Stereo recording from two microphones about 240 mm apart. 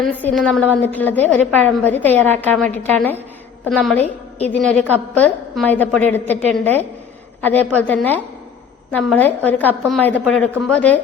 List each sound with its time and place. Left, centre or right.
0.2 s a woman's voice: centre
4.0 s a woman's voice: left
5.1 s a woman's voice: centre